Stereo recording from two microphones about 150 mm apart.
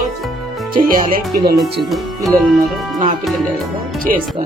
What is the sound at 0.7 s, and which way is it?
Speech, 75° right (ahead or behind).